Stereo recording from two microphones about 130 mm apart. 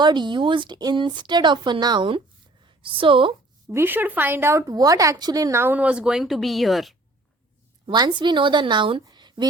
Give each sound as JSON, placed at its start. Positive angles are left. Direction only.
{"t": 0.0, "sound": "a woman's voice", "side_deg": -35}
{"t": 3.7, "sound": "a woman's voice", "side_deg": -15}
{"t": 7.9, "sound": "speech", "side_deg": -35}